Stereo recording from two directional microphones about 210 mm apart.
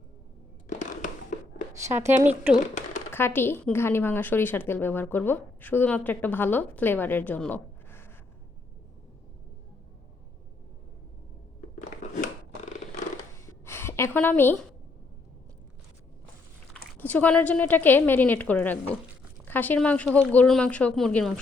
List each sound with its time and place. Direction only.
0.7 s a sound: 35° left (ahead or behind)
1.8 s a woman's voice: 10° right (ahead or behind)
2.6 s speech: 35° left (ahead or behind)
3.1 s a woman's voice: 10° left (ahead or behind)
13.3 s a sound: 10° left (ahead or behind)
17.0 s a woman's voice: 10° left (ahead or behind)